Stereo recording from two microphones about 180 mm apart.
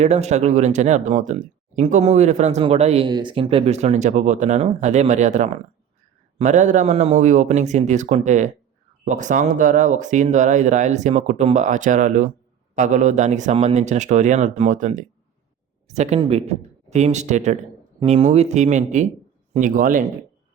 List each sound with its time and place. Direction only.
0.0 s speech: 40° right (ahead or behind)